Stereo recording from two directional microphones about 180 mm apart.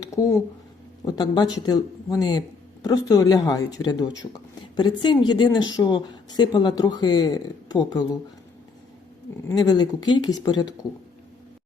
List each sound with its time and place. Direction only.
0.0 s speech: 15° left (ahead or behind)
9.5 s speech: 20° left (ahead or behind)